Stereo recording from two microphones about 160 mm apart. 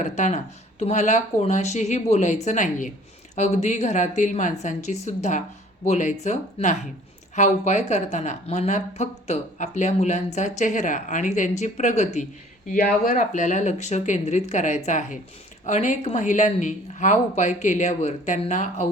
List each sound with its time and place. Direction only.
0.0 s a woman's voice: 45° left (ahead or behind)
12.6 s a woman's voice: 60° left (ahead or behind)